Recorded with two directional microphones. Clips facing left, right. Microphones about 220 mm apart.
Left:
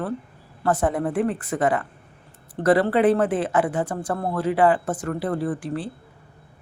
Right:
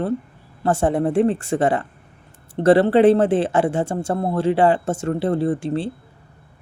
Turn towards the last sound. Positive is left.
turn(degrees=-25)  # may be behind; listen again after turning